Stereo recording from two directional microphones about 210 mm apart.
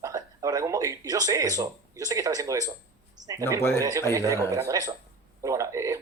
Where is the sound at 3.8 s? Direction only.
15° right (ahead or behind).